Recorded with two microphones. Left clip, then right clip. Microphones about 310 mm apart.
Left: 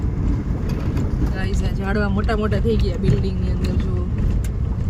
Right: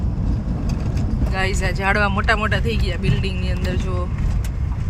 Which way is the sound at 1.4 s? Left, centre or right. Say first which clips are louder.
Right 6 dB; right.